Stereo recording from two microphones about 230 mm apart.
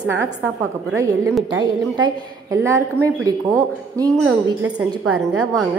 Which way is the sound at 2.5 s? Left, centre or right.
Centre.